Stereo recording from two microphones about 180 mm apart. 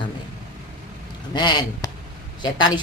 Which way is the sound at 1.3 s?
25° left (ahead or behind).